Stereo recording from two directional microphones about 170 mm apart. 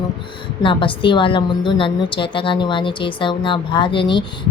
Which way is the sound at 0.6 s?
30° left (ahead or behind).